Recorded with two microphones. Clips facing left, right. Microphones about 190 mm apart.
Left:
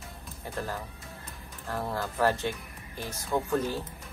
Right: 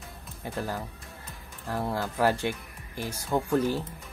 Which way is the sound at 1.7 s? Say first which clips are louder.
Right 2 dB; 10° right (ahead or behind).